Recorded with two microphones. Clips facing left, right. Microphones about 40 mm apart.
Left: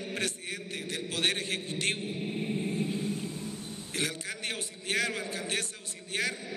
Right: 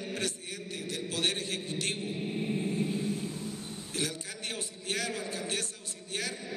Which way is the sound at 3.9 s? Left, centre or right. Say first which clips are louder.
Left 2 dB; left.